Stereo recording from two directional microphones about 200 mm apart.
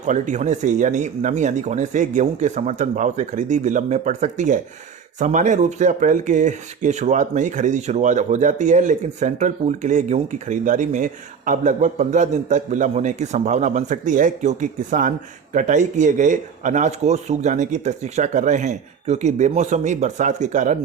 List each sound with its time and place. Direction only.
0.0 s speech: 35° right (ahead or behind)